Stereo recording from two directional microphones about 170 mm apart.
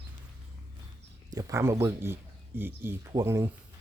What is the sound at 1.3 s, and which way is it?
Speech, 15° right (ahead or behind).